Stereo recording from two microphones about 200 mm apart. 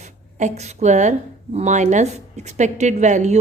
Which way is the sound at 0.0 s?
35° right (ahead or behind).